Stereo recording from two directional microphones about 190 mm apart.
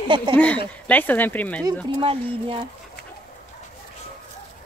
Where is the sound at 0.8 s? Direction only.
10° left (ahead or behind).